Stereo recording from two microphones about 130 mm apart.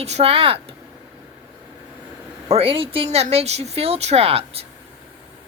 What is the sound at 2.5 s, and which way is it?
A woman's voice, 45° right (ahead or behind).